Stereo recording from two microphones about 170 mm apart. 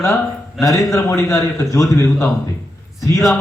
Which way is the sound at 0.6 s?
20° left (ahead or behind).